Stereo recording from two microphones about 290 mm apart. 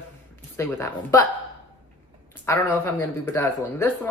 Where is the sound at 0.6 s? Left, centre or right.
Centre.